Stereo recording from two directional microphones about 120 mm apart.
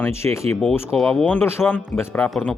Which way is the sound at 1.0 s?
5° left (ahead or behind).